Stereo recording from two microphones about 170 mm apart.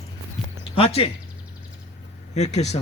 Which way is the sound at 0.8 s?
35° left (ahead or behind).